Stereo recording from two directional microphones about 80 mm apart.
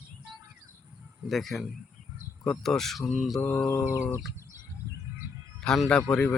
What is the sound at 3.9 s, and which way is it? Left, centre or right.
Bird, left.